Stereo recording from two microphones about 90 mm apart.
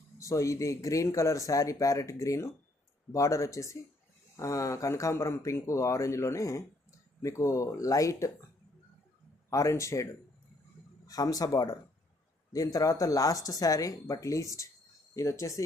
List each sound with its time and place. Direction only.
0.2 s speech: 35° left (ahead or behind)
9.5 s speech: 35° left (ahead or behind)